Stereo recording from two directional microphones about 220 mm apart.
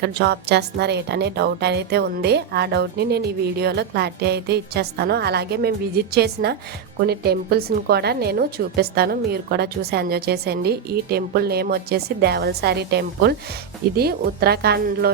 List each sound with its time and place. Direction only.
0.0 s a woman's voice: 50° right (ahead or behind)